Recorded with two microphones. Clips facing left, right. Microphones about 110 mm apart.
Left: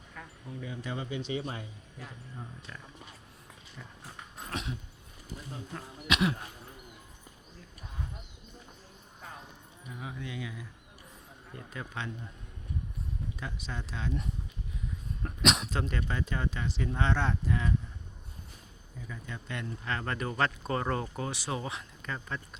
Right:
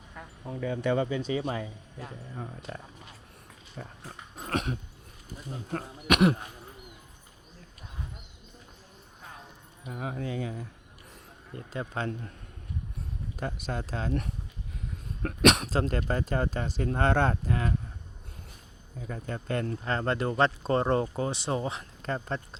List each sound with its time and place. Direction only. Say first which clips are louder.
0.6 s a man's voice: right 11 dB; 65° right (ahead or behind)
1.1 s speech: right 5 dB; 40° right (ahead or behind)
3.8 s speech: right 7 dB; 45° right (ahead or behind)
4.4 s dog: right 7 dB; 55° right (ahead or behind)
5.7 s a man's voice: right 6 dB; 55° right (ahead or behind)
9.8 s speech: right 7 dB; 50° right (ahead or behind)
13.3 s speech: right 6 dB; 50° right (ahead or behind)
15.2 s a man's voice: right 7 dB; 60° right (ahead or behind)
15.7 s speech: right 6 dB; 40° right (ahead or behind); by 17.7 s 55° right (ahead or behind)
19.0 s speech: right 8 dB; 50° right (ahead or behind)
19.8 s speech: right 2 dB; 35° right (ahead or behind)